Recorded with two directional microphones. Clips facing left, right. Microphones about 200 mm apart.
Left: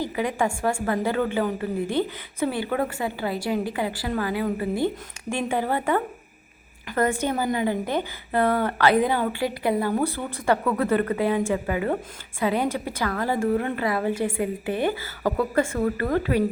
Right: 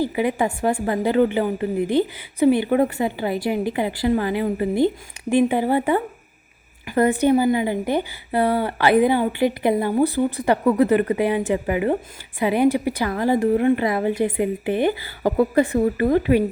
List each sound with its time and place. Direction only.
0.0 s a woman's voice: 15° right (ahead or behind)